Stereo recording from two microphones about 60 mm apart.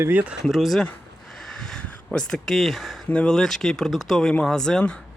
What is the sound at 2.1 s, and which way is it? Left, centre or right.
Speech, centre.